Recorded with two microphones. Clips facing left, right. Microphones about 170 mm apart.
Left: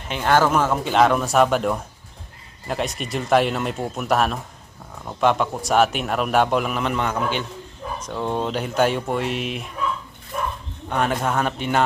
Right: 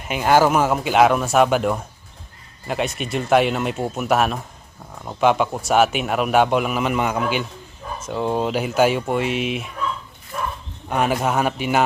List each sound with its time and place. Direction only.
0.1 s a man's voice: 10° right (ahead or behind)
10.8 s speech: 5° right (ahead or behind)